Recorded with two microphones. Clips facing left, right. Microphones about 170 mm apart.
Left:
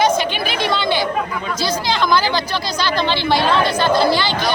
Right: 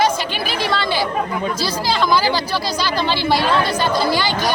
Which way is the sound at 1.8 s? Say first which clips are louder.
Right 1 dB; 5° right (ahead or behind).